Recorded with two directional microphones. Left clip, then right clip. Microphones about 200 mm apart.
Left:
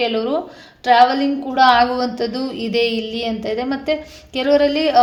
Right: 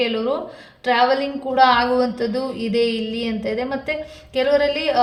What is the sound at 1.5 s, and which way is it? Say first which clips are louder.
Speech: left 2 dB; 35° left (ahead or behind).